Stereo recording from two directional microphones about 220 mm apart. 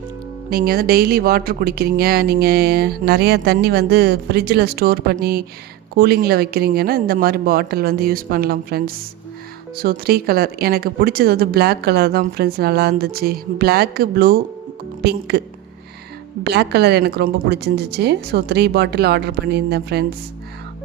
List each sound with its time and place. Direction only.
0.5 s speech: 45° right (ahead or behind)
16.4 s speech: 50° right (ahead or behind)